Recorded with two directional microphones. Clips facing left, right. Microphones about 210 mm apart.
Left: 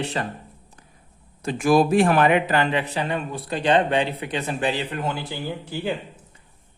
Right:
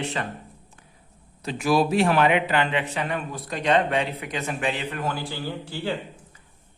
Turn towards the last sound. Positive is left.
turn(degrees=15)  # may be behind; listen again after turning